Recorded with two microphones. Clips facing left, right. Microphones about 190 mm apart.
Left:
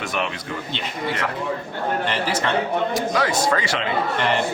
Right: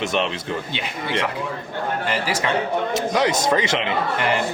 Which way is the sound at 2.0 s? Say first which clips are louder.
Even; 10° right (ahead or behind).